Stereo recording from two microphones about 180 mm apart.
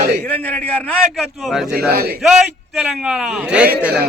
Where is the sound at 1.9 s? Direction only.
55° right (ahead or behind).